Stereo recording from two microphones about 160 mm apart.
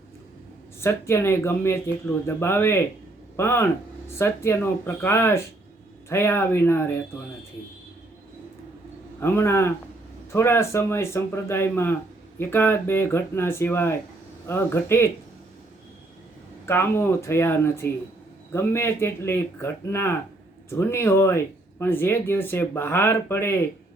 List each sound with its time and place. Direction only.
0.8 s speech: 15° left (ahead or behind)
9.2 s speech: 15° left (ahead or behind)
16.6 s speech: 15° left (ahead or behind)